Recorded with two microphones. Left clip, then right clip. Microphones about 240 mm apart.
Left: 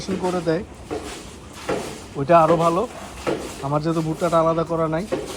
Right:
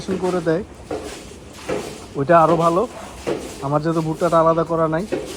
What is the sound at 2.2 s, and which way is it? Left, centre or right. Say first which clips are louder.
Speech: right 1 dB; right.